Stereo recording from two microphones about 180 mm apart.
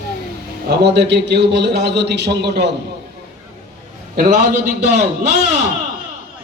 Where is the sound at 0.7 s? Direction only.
70° right (ahead or behind).